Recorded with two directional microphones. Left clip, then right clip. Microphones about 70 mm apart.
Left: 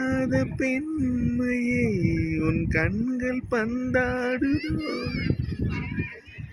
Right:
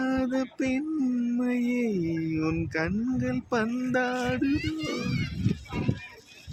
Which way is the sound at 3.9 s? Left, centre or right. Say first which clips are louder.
Left 3 dB; centre.